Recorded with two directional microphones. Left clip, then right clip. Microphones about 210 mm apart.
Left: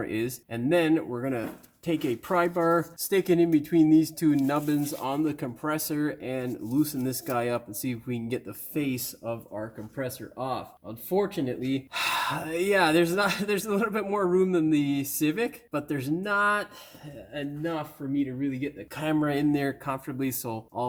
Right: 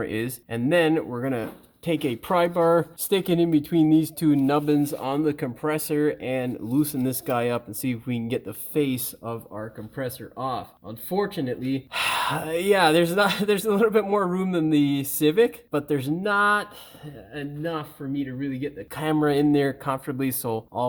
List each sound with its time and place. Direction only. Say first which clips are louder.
0.0 s speech: right 2 dB; 40° right (ahead or behind)
18.9 s speech: right 5 dB; 45° right (ahead or behind)